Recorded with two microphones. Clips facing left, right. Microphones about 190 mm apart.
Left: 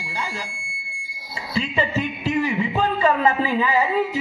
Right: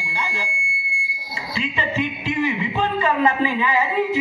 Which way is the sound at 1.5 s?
40° left (ahead or behind).